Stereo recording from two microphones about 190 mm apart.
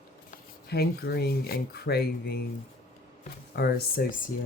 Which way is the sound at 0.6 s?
55° left (ahead or behind).